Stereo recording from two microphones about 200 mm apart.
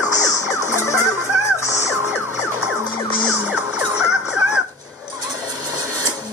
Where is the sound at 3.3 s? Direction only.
5° right (ahead or behind).